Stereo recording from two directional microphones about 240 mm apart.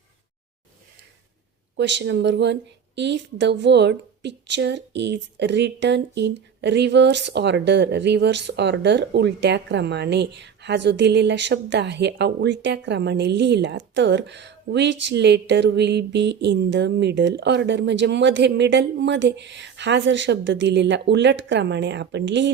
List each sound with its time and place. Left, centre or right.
1.7 s a woman's voice: right